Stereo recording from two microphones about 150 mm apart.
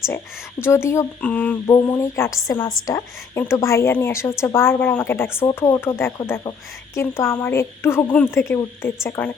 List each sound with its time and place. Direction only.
0.6 s speech: 15° left (ahead or behind)
1.6 s speech: 20° left (ahead or behind)